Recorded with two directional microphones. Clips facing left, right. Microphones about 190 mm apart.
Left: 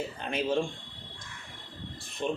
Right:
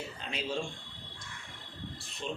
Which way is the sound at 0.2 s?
55° left (ahead or behind).